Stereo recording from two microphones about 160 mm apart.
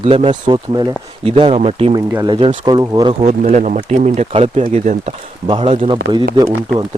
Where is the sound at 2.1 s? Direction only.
25° right (ahead or behind).